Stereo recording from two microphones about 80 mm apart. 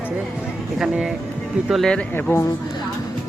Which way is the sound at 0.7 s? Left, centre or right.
Centre.